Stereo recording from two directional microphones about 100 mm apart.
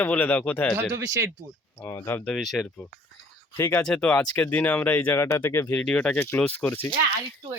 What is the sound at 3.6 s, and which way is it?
Speech, 15° left (ahead or behind).